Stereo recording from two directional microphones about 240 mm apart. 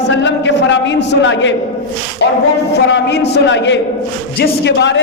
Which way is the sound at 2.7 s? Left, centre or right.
Left.